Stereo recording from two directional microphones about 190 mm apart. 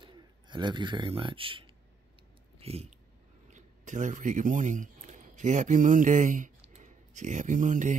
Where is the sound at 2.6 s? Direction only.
35° right (ahead or behind).